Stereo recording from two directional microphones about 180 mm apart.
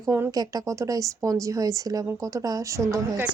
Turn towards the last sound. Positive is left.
turn(degrees=-15)  # may be behind; listen again after turning